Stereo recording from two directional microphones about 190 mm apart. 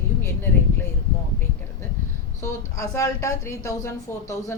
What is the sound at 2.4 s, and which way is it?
A woman's voice, 15° left (ahead or behind).